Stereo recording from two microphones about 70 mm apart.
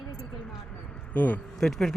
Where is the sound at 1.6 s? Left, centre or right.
Centre.